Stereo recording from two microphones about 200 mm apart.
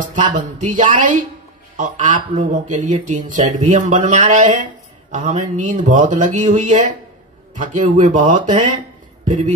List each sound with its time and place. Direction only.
0.0 s speech: 40° right (ahead or behind)